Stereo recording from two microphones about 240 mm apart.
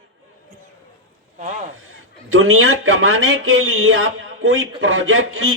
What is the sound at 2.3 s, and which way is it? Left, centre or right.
Speech, right.